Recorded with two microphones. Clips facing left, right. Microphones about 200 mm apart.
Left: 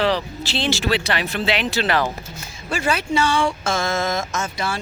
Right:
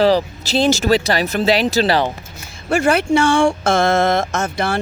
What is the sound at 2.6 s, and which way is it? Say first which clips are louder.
Speech: right 7 dB; 50° right (ahead or behind).